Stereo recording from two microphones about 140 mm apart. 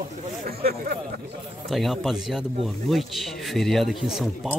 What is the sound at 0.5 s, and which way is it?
Speech, 90° right.